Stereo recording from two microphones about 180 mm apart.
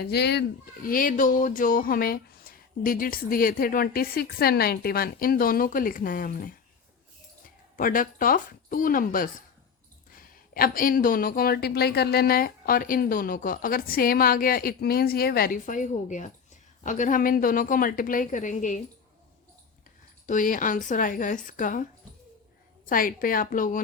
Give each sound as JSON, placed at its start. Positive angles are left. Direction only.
{"t": 0.0, "sound": "a child's voice", "side_deg": 65}
{"t": 0.9, "sound": "speech", "side_deg": 50}
{"t": 7.8, "sound": "speech", "side_deg": 50}
{"t": 20.2, "sound": "speech", "side_deg": 45}
{"t": 22.9, "sound": "speech", "side_deg": 50}